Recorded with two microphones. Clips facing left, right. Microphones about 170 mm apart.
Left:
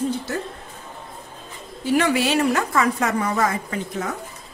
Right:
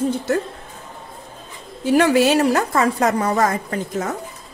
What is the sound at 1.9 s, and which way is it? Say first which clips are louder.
A woman's voice: right 5 dB; 45° right (ahead or behind).